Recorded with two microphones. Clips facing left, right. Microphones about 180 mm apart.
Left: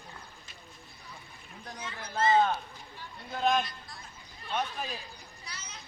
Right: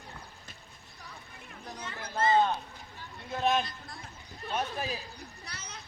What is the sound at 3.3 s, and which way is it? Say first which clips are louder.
A man's voice: even; 5° right (ahead or behind).